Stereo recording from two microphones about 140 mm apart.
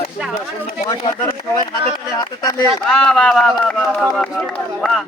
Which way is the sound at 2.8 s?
5° left (ahead or behind).